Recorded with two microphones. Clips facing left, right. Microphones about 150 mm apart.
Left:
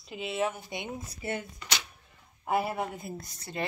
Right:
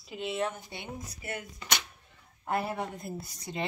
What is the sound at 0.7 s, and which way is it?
Speech, 25° left (ahead or behind).